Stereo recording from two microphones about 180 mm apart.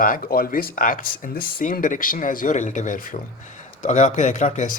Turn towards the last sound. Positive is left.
turn(degrees=45)  # may be behind; listen again after turning